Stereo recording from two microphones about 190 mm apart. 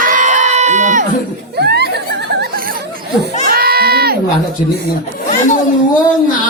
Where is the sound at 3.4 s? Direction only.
50° right (ahead or behind).